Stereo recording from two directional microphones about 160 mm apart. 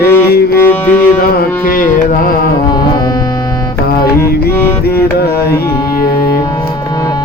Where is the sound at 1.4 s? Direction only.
60° left (ahead or behind).